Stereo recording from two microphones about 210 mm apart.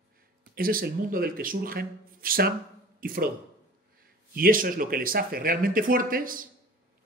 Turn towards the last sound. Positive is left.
turn(degrees=-40)  # may be behind; listen again after turning